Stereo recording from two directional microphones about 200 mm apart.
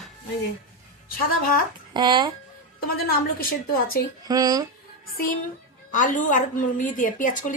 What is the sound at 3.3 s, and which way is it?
Speech, 45° left (ahead or behind).